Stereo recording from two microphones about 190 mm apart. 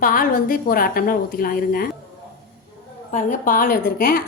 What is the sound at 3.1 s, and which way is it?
A woman's voice, 40° left (ahead or behind).